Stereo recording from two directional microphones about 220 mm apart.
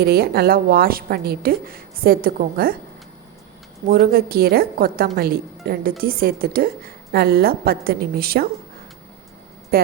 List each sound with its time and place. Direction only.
0.0 s a woman's voice: 45° right (ahead or behind)
3.8 s a woman's voice: 45° right (ahead or behind)
9.7 s speech: 45° right (ahead or behind)